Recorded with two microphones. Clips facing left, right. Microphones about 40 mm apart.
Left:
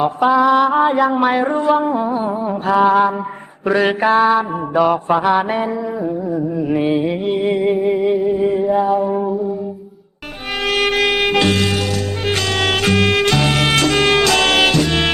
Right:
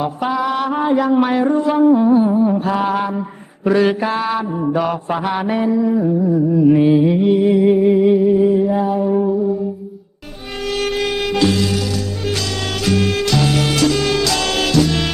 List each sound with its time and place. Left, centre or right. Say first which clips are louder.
0.2 s music: left 8 dB; centre
3.8 s mantra: left 4 dB; centre
4.7 s music: left 6 dB; centre
7.3 s mantra: right 3 dB; left
7.7 s mantra: right 3 dB; centre
10.8 s wind instrument: left 3 dB; left
12.6 s music: left 2 dB; left